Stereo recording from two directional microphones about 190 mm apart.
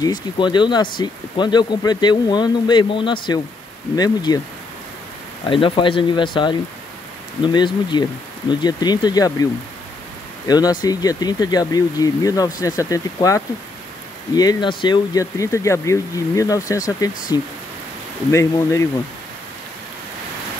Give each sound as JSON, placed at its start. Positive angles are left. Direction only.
{"t": 0.0, "sound": "speech", "side_deg": 25}
{"t": 5.5, "sound": "speech", "side_deg": 25}